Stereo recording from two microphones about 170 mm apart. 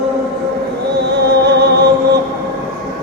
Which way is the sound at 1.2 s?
80° right.